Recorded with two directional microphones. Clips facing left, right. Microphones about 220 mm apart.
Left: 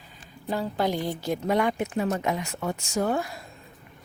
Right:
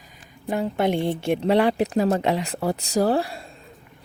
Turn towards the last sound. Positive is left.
turn(degrees=-30)  # may be behind; listen again after turning